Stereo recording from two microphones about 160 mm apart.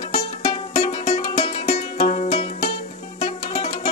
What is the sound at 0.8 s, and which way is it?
Music, 45° left (ahead or behind).